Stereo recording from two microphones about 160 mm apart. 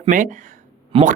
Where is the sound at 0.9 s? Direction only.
50° right (ahead or behind).